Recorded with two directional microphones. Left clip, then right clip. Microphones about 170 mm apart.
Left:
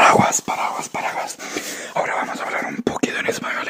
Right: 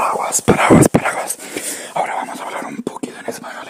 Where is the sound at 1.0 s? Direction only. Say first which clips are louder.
Right 4 dB; 25° right (ahead or behind).